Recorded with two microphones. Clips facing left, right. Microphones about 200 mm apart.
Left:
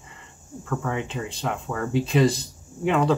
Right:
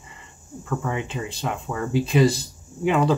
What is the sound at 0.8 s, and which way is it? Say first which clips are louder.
Speech: left 1 dB; 5° right (ahead or behind).